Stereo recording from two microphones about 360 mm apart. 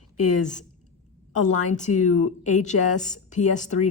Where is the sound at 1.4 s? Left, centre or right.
Centre.